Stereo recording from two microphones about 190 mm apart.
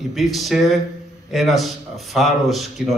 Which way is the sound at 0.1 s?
Centre (ahead or behind).